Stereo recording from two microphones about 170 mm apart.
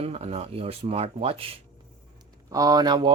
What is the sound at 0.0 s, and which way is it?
Speech, 40° right (ahead or behind).